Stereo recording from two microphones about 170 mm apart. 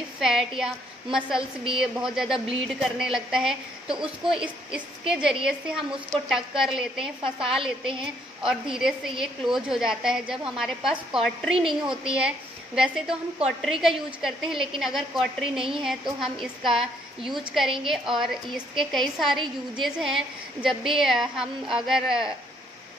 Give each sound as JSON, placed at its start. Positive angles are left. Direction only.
{"t": 0.2, "sound": "a woman's voice", "side_deg": 0}
{"t": 3.9, "sound": "a woman's voice", "side_deg": -30}
{"t": 4.6, "sound": "a woman's voice", "side_deg": -5}
{"t": 7.2, "sound": "a woman's voice", "side_deg": -30}
{"t": 7.5, "sound": "a woman's voice", "side_deg": -5}